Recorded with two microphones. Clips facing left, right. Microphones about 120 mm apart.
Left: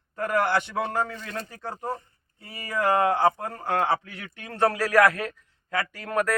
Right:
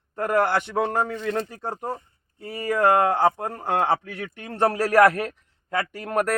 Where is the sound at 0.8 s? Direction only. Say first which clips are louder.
Right 4 dB; 20° right (ahead or behind).